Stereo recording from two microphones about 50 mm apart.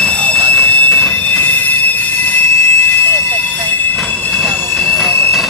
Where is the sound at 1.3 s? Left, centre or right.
Left.